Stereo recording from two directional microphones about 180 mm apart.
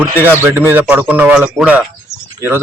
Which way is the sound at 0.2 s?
10° right (ahead or behind).